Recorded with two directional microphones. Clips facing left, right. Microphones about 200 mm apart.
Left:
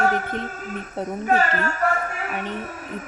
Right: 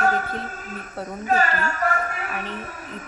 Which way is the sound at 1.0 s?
20° left (ahead or behind).